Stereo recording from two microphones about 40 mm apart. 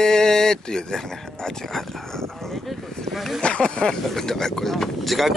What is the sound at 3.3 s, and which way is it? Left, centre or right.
Speech, left.